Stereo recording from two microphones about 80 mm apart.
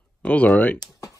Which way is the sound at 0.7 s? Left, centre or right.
Left.